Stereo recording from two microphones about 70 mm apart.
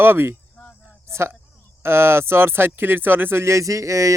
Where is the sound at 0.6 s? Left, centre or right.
Left.